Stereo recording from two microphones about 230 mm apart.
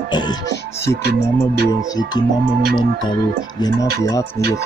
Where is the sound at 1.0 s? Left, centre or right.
Right.